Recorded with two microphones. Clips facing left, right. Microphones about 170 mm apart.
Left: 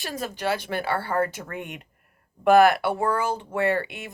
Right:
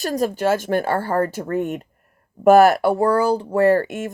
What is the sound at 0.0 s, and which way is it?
Speech, 40° right (ahead or behind).